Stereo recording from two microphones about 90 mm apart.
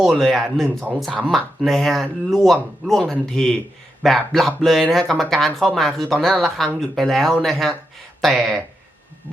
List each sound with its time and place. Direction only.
0.0 s speech: centre (ahead or behind)